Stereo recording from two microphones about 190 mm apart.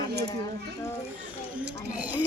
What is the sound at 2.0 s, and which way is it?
Speech, 10° right (ahead or behind).